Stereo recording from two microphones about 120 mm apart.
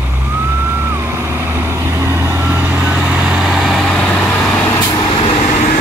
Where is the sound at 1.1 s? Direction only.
20° right (ahead or behind); by 4.3 s 10° left (ahead or behind).